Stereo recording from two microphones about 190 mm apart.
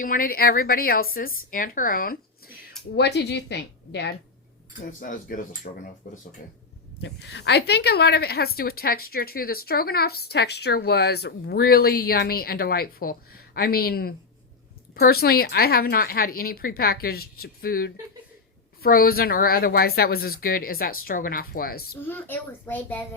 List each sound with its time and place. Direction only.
0.0 s a woman's voice: 45° left (ahead or behind)
2.9 s a woman's voice: 60° left (ahead or behind)
4.9 s a woman's voice: 45° left (ahead or behind)
7.0 s a woman's voice: 65° left (ahead or behind)
22.0 s a child's voice: 10° left (ahead or behind)